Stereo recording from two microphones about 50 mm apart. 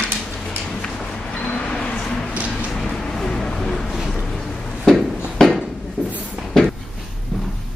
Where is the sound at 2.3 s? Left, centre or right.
Right.